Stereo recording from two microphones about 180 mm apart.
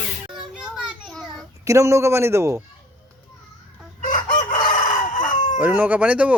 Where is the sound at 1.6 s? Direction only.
15° right (ahead or behind).